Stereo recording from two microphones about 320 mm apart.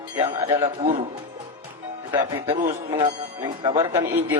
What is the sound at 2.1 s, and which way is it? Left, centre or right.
Speech, centre.